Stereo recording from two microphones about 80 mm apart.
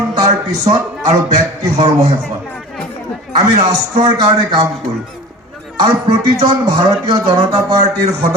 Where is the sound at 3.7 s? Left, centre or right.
Right.